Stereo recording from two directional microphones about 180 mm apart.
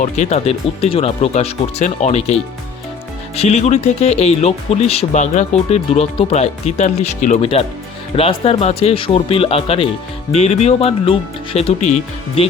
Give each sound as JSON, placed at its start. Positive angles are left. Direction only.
{"t": 0.0, "sound": "speech", "side_deg": 40}